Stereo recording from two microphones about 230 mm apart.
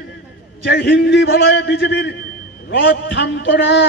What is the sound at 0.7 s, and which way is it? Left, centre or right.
A man's voice, left.